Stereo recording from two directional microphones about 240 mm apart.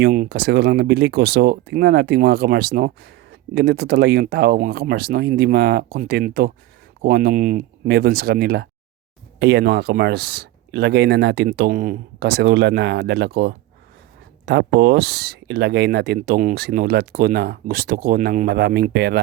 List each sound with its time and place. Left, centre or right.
0.0 s speech: right